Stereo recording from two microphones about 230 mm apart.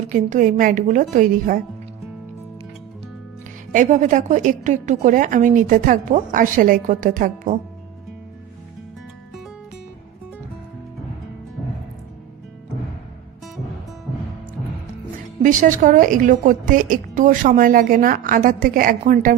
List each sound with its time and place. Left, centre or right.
0.1 s a woman's voice: right
3.7 s a woman's voice: right
15.4 s a woman's voice: right